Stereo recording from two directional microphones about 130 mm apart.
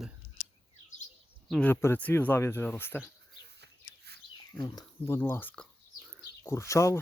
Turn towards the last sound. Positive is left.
turn(degrees=25)  # may be behind; listen again after turning